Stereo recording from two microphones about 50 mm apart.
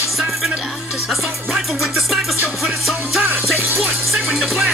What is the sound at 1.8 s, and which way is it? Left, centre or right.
Music, centre.